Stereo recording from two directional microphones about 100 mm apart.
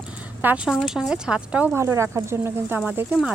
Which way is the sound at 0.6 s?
5° right (ahead or behind).